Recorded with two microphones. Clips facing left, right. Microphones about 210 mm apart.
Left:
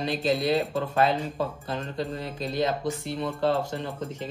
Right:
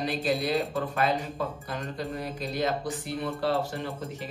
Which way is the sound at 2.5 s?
25° left (ahead or behind).